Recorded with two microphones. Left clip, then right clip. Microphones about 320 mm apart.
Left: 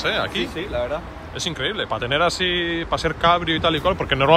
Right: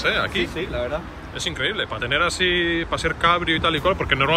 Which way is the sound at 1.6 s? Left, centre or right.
Centre.